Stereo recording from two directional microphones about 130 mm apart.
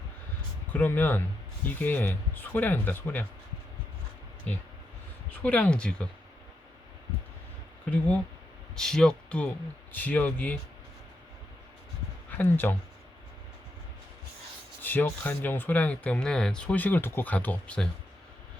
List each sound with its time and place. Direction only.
0.7 s speech: 15° left (ahead or behind)
5.4 s speech: 10° left (ahead or behind)
8.7 s speech: 5° left (ahead or behind)
12.3 s speech: 15° left (ahead or behind)
14.8 s speech: 15° left (ahead or behind)